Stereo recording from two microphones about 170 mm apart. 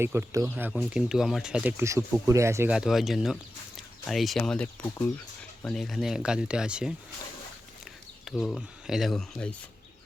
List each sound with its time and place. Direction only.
0.0 s speech: 15° right (ahead or behind)
0.7 s speech: centre (ahead or behind)
2.7 s speech: centre (ahead or behind)
8.2 s speech: centre (ahead or behind)